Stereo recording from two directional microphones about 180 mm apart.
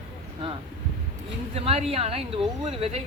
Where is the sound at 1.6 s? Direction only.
35° right (ahead or behind).